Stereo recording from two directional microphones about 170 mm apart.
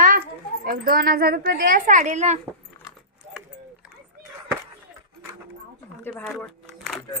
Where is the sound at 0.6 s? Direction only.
60° right (ahead or behind); by 2.4 s 40° right (ahead or behind).